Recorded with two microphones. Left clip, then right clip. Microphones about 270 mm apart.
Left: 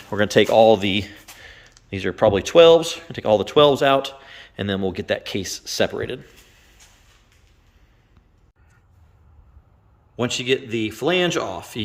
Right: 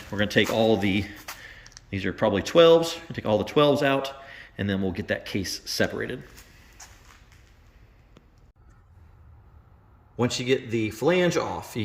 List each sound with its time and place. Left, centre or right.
0.1 s speech: centre
10.2 s speech: centre